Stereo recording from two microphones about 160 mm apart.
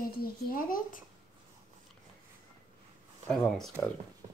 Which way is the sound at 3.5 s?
5° left (ahead or behind).